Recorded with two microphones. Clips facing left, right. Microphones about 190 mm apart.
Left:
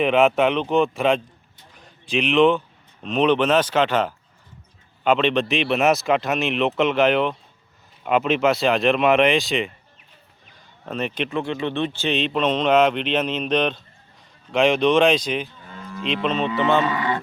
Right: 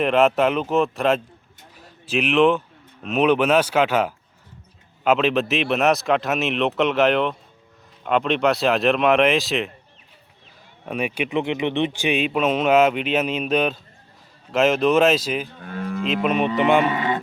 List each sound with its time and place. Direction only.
0.0 s speech: centre (ahead or behind)
1.7 s a sound: 5° right (ahead or behind)
3.0 s speech: 5° right (ahead or behind)
10.8 s speech: 10° right (ahead or behind)
15.5 s moo: 65° right (ahead or behind)
16.2 s speech: 10° right (ahead or behind)